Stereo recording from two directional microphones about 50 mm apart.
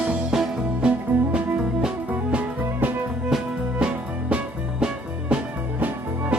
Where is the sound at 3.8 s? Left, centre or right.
Centre.